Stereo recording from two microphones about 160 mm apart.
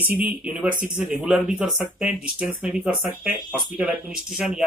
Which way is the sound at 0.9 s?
5° right (ahead or behind).